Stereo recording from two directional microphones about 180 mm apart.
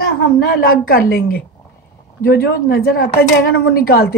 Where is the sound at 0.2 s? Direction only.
55° left (ahead or behind).